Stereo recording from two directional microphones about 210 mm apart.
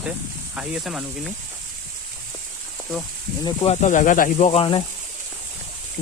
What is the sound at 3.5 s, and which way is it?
Speech, 30° left (ahead or behind).